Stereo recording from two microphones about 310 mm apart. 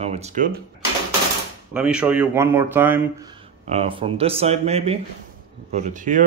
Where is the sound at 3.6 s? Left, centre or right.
Centre.